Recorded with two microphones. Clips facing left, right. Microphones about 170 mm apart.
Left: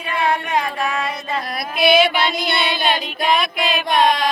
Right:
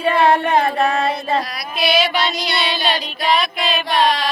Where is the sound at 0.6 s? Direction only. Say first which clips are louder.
Right 5 dB; 35° right (ahead or behind).